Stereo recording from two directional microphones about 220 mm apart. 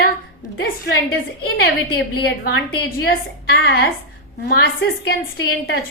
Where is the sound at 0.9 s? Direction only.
50° left (ahead or behind).